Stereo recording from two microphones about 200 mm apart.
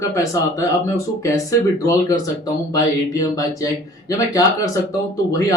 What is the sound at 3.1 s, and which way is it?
Speech, 15° left (ahead or behind).